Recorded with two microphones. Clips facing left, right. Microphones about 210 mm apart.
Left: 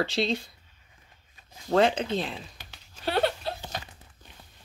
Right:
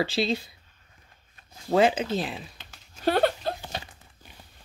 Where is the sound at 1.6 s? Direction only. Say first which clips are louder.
Right 1 dB; 5° right (ahead or behind).